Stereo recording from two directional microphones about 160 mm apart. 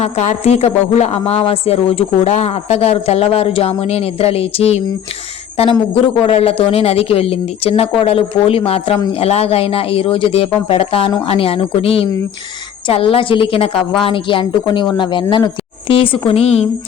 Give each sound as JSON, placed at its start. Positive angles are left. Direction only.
{"t": 0.0, "sound": "a woman's voice", "side_deg": 45}
{"t": 6.1, "sound": "a woman's voice", "side_deg": 40}